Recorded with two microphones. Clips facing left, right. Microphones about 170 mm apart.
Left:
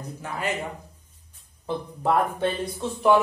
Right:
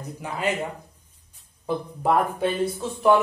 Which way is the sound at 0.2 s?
20° right (ahead or behind).